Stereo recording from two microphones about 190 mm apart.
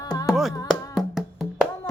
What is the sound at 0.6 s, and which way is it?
Music, centre (ahead or behind).